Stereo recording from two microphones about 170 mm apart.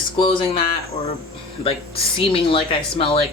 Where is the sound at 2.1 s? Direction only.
35° left (ahead or behind).